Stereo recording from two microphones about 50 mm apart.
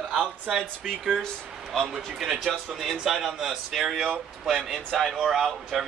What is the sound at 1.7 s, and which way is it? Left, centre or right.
A man's voice, centre.